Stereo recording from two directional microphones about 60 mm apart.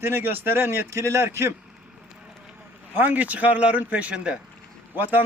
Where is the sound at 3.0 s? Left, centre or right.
Right.